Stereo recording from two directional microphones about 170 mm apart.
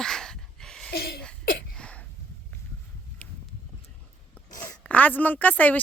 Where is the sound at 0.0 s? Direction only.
5° left (ahead or behind).